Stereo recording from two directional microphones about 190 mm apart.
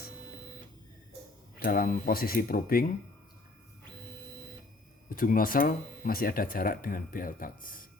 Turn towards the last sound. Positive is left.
turn(degrees=45)  # may be behind; listen again after turning